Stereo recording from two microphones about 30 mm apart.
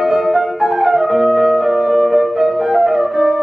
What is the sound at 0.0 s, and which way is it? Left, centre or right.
Music, centre.